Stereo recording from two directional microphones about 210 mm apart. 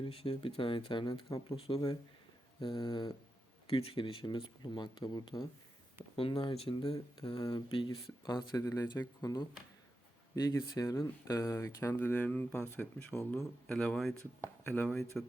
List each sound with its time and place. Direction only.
0.0 s speech: 25° left (ahead or behind); by 15.0 s 10° left (ahead or behind)